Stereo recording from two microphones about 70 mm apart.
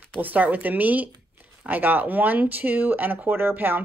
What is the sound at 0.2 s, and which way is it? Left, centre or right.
Speech, right.